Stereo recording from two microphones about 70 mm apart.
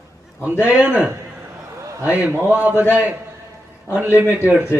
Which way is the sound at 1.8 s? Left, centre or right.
Right.